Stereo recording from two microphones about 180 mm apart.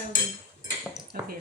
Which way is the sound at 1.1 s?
55° right (ahead or behind).